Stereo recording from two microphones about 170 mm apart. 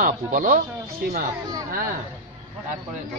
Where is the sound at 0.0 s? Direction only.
55° right (ahead or behind).